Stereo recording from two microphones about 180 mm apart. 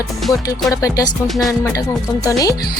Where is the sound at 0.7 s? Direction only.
20° left (ahead or behind).